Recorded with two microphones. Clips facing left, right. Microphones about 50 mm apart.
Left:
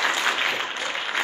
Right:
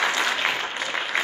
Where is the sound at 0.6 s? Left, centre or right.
Centre.